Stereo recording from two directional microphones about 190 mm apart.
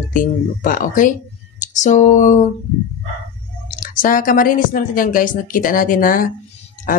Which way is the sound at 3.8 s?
45° left (ahead or behind).